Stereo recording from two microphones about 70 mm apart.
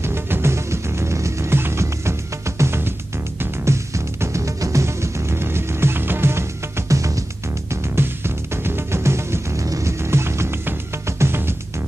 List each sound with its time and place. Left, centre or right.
0.0 s music: right
6.9 s music: right
7.7 s music: right